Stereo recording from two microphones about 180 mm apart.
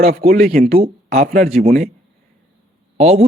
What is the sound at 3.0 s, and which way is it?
Speech, 35° right (ahead or behind).